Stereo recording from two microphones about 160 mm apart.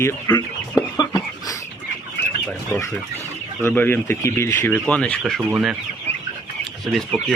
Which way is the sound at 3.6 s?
10° left (ahead or behind).